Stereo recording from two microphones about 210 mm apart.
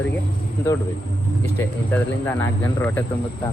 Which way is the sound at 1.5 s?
10° left (ahead or behind).